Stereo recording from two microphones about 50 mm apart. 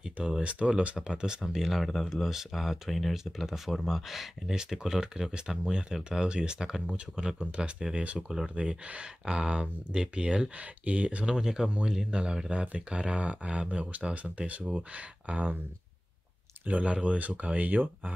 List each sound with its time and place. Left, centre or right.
0.0 s speech: centre
1.4 s speech: centre
7.3 s speech: right
8.2 s speech: centre
8.8 s speech: right
12.4 s speech: right
16.6 s speech: right